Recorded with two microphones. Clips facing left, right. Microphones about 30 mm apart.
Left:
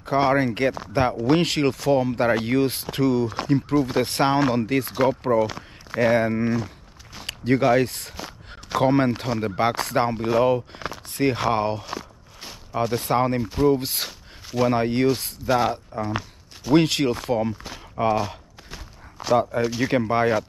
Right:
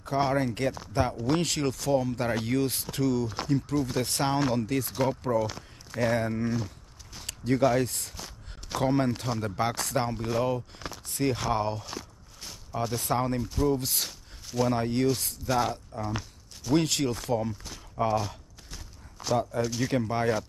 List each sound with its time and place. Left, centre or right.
0.0 s speech: left
4.9 s speech: left
8.2 s speech: left
11.8 s speech: centre
16.0 s a sound: left
16.7 s speech: left
18.3 s a sound: left
19.5 s speech: left